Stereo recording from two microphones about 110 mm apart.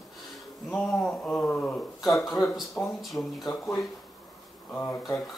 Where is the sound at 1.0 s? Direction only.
10° left (ahead or behind).